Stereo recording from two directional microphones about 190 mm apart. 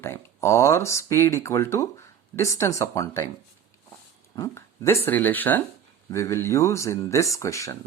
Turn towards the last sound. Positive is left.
turn(degrees=15)  # may be behind; listen again after turning